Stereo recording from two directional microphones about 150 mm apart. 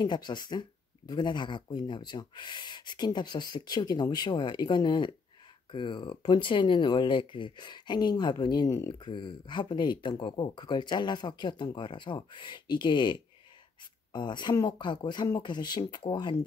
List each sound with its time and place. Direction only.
0.0 s speech: 30° left (ahead or behind)
9.0 s speech: 30° left (ahead or behind)